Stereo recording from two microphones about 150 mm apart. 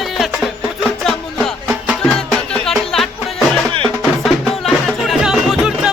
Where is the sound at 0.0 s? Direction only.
Centre (ahead or behind).